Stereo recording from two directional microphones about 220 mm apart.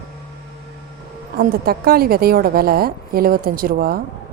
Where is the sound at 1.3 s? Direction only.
45° right (ahead or behind).